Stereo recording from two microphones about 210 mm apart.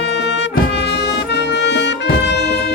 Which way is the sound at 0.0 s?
55° left (ahead or behind).